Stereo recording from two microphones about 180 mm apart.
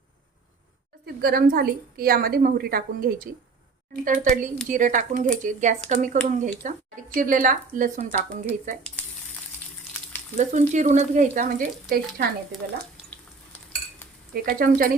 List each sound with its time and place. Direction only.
1.0 s a woman's voice: 60° right (ahead or behind)
10.3 s a woman's voice: 40° right (ahead or behind); by 12.3 s 55° right (ahead or behind)
14.4 s a woman's voice: 50° right (ahead or behind)